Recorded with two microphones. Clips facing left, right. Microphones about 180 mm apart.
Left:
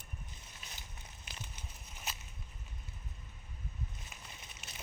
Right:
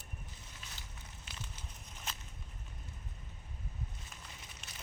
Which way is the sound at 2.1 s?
10° left (ahead or behind).